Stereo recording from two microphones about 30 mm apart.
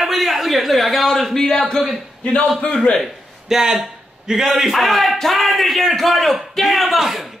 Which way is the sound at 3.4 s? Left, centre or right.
Centre.